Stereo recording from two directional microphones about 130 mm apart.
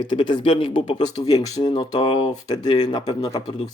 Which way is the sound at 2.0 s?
55° left (ahead or behind).